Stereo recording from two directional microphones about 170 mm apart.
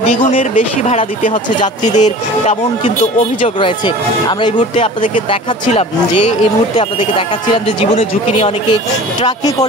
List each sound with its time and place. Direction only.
0.2 s speech: 50° left (ahead or behind)
3.4 s speech: 30° left (ahead or behind)
9.2 s speech: 20° left (ahead or behind)